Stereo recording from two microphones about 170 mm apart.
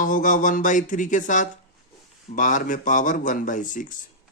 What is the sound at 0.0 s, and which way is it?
Speech, 50° left (ahead or behind).